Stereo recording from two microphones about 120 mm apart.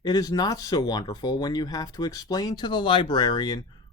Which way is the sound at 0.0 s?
30° left (ahead or behind).